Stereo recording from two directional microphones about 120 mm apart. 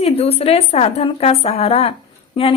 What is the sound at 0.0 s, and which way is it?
A woman's voice, 55° left (ahead or behind).